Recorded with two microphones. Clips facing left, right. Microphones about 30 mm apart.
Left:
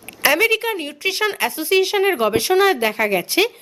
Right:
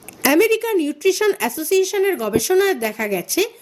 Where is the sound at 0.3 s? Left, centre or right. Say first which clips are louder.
Right 3 dB; left.